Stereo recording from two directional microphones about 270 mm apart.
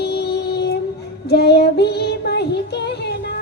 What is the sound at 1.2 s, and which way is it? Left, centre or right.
Child singing, left.